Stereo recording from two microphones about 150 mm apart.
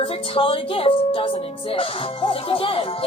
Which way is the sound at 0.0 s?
40° left (ahead or behind).